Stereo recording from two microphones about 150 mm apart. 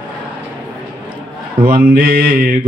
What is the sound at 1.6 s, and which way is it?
Mantra, 80° right.